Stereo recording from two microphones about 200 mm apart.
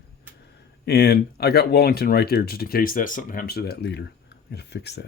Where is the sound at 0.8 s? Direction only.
50° left (ahead or behind).